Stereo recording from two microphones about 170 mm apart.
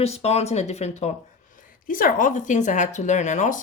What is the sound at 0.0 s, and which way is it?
Speech, 40° left (ahead or behind).